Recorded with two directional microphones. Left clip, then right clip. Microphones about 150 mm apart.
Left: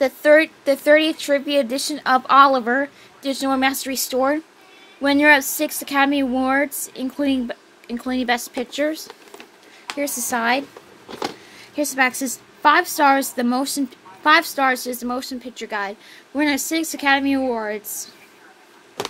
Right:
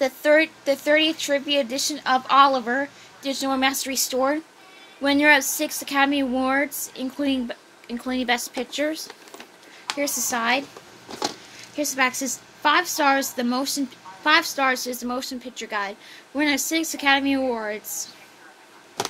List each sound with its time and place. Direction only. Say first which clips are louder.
0.0 s a woman's voice: left 4 dB; 55° left (ahead or behind)
11.7 s a woman's voice: left 3 dB; 50° left (ahead or behind)